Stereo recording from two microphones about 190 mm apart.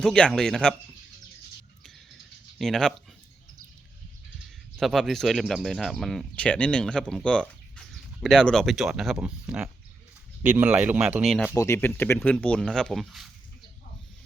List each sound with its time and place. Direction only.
0.0 s speech: centre (ahead or behind)
2.6 s speech: 5° left (ahead or behind)
4.8 s speech: centre (ahead or behind)
11.5 s speech: 15° left (ahead or behind)